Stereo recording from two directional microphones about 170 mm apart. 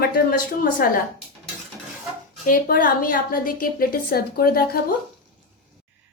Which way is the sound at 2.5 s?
55° left (ahead or behind).